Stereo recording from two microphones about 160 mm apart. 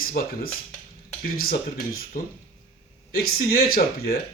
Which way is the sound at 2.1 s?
55° left (ahead or behind).